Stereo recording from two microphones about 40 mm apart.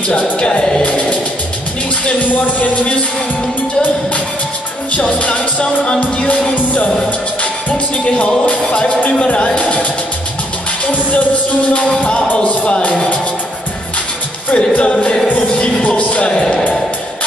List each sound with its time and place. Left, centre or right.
0.1 s speech: left
2.3 s music: left
5.2 s music: left
7.7 s music: left
9.2 s speech: left
9.6 s music: left
10.9 s music: left
14.5 s speech: left
15.2 s music: left
16.3 s a man's voice: centre